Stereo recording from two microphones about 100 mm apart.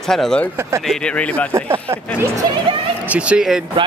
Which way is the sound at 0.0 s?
5° left (ahead or behind).